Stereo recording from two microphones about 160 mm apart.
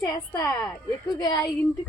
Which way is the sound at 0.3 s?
20° left (ahead or behind).